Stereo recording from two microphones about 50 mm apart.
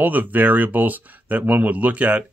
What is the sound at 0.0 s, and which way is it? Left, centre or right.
Speech, right.